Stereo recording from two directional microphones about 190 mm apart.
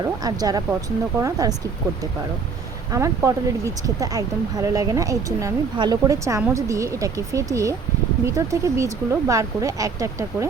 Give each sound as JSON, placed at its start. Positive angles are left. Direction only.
{"t": 0.0, "sound": "speech", "side_deg": -20}
{"t": 2.9, "sound": "speech", "side_deg": -15}